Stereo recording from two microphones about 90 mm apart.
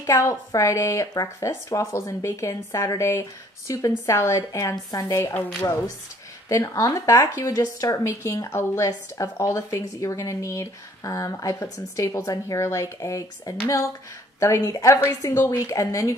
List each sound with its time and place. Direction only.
0.0 s speech: 35° left (ahead or behind)
5.6 s speech: 30° left (ahead or behind)